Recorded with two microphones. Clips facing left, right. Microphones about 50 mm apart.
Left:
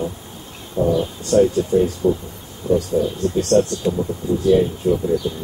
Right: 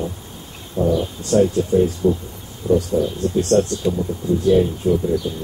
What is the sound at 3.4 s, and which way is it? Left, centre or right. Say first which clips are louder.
Speech: left 1 dB; centre.